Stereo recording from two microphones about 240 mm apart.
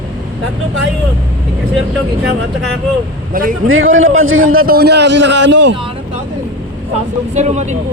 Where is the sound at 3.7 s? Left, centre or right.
Right.